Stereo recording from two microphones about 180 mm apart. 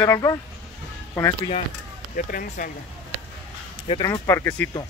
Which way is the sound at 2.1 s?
50° left (ahead or behind).